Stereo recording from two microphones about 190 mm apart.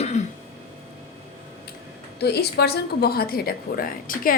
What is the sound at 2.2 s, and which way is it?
A woman's voice, 60° left (ahead or behind).